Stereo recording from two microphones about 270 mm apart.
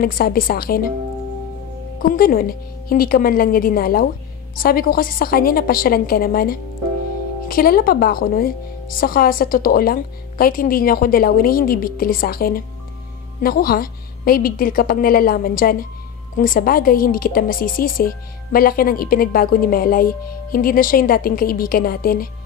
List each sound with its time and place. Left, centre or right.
0.0 s a woman's voice: left
2.0 s a woman's voice: left